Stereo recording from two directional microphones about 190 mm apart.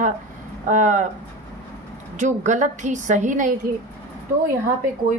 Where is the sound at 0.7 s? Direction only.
40° right (ahead or behind).